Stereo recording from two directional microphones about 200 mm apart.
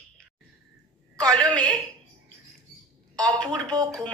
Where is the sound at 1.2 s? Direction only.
5° left (ahead or behind).